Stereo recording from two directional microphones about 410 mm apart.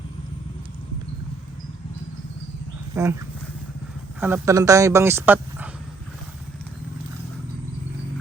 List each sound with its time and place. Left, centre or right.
2.9 s speech: centre
4.2 s speech: centre